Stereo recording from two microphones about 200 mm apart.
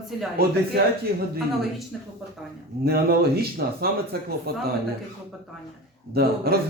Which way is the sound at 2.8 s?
50° right (ahead or behind).